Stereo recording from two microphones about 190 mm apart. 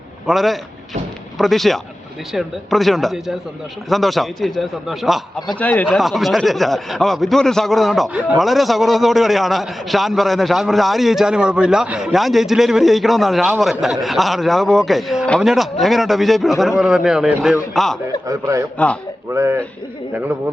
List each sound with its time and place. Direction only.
0.3 s speech: centre (ahead or behind)
18.3 s a man's voice: 15° right (ahead or behind)